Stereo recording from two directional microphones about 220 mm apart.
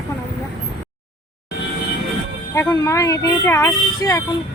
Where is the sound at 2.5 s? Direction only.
15° left (ahead or behind).